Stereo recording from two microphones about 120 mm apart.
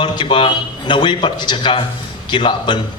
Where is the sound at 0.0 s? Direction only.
40° left (ahead or behind).